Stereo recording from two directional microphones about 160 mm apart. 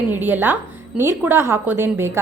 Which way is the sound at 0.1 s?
10° right (ahead or behind).